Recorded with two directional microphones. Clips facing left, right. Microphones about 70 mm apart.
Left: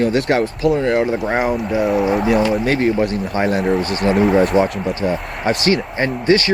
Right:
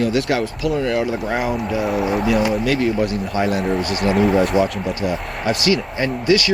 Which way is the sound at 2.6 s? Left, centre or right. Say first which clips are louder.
Left 2 dB; left.